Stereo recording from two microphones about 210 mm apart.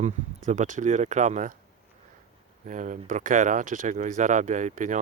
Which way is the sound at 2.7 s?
35° right (ahead or behind).